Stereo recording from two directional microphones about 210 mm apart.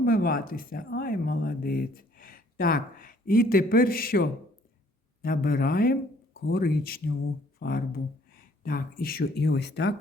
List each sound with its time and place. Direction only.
0.0 s speech: 45° left (ahead or behind)